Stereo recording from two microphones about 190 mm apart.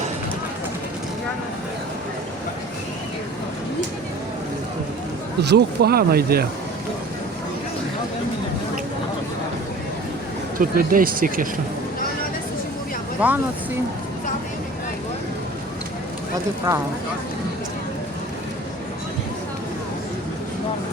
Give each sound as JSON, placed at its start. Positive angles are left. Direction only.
{"t": 5.4, "sound": "speech", "side_deg": -60}
{"t": 10.6, "sound": "speech", "side_deg": -50}
{"t": 13.2, "sound": "speech", "side_deg": -10}